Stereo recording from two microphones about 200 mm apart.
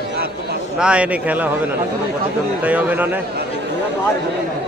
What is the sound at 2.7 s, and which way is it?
Speech, 10° right (ahead or behind).